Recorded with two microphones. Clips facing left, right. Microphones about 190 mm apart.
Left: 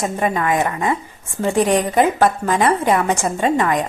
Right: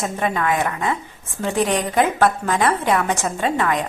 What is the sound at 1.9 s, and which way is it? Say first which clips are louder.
A woman's voice: left 2 dB; 10° left (ahead or behind).